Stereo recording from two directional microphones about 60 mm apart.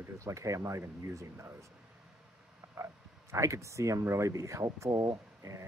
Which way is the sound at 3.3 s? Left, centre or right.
Right.